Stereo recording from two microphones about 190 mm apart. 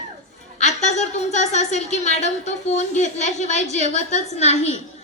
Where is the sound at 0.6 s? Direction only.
35° left (ahead or behind).